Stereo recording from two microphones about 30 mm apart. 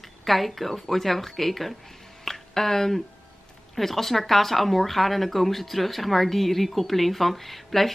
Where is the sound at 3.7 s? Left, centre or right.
Centre.